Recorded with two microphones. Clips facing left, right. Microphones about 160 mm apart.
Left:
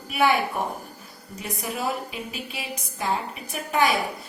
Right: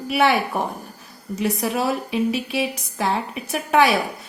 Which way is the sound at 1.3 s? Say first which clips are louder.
Right 9 dB; 80° right.